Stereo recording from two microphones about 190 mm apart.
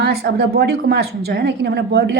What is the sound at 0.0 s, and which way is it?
A woman's voice, 55° right (ahead or behind).